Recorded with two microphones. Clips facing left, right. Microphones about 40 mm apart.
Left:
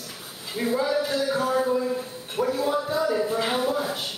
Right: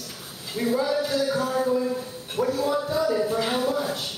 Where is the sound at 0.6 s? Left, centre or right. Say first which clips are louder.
Even; centre.